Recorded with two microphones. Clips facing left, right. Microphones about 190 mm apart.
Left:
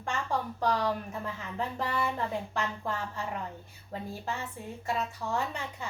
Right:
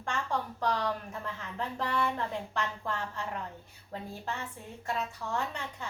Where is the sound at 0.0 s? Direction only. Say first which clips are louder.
Left 1 dB; 5° left (ahead or behind).